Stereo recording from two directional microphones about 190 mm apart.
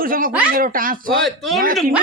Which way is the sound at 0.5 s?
45° right (ahead or behind).